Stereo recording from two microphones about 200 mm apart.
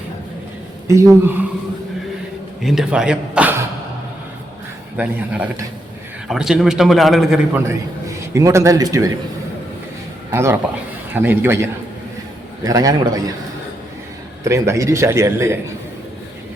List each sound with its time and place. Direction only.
0.9 s a man's voice: 15° right (ahead or behind)
2.6 s a man's voice: centre (ahead or behind)
4.9 s a man's voice: 5° right (ahead or behind)
7.7 s a man's voice: 15° right (ahead or behind)
10.3 s a man's voice: 10° right (ahead or behind)
14.4 s a man's voice: 15° right (ahead or behind)